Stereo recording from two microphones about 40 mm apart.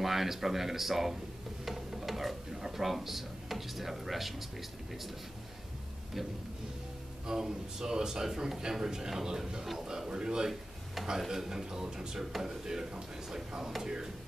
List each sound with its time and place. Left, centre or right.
0.0 s speech: centre
6.2 s a man's voice: centre